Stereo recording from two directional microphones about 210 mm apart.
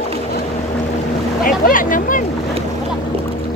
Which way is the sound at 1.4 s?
40° left (ahead or behind).